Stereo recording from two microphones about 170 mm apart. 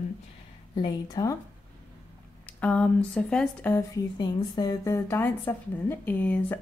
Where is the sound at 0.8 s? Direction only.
25° left (ahead or behind).